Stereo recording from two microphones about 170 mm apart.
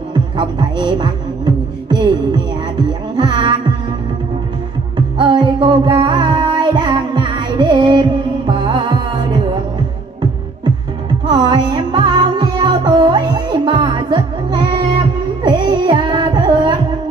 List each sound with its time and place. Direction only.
0.1 s music: 25° right (ahead or behind)
4.9 s music: 25° right (ahead or behind)
11.2 s music: 25° right (ahead or behind)